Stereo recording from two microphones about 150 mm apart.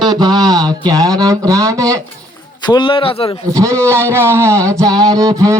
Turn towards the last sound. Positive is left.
turn(degrees=-25)  # may be behind; listen again after turning